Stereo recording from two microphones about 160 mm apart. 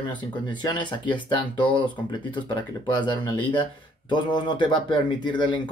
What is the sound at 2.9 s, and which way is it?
Speech, 30° left (ahead or behind).